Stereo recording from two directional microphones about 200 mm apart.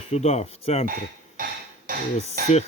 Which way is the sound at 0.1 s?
35° left (ahead or behind).